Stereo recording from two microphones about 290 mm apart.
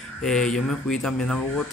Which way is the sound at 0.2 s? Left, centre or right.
Centre.